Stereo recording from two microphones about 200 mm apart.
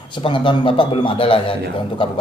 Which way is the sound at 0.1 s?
25° left (ahead or behind).